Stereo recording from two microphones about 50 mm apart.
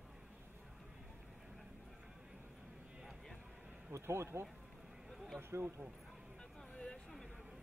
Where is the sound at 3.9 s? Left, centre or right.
Right.